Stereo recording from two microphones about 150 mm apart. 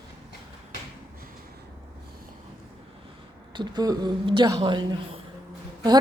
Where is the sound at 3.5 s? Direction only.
25° right (ahead or behind).